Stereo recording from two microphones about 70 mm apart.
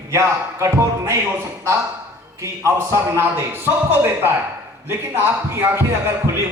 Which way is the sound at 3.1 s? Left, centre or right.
Right.